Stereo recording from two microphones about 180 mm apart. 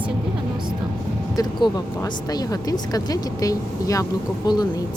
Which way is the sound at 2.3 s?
20° left (ahead or behind).